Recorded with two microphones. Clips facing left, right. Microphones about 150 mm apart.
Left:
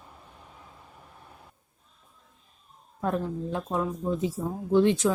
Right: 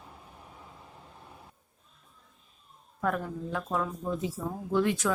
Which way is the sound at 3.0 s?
25° left (ahead or behind).